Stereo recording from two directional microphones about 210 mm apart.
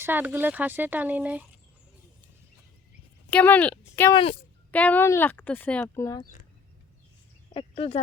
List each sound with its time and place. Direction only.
0.0 s speech: 10° right (ahead or behind)
3.2 s speech: 5° left (ahead or behind)
4.1 s speech: 25° left (ahead or behind)
4.7 s speech: 5° left (ahead or behind)
7.5 s speech: 30° left (ahead or behind)